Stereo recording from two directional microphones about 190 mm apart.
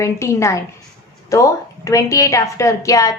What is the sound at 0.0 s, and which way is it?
A woman's voice, 15° left (ahead or behind).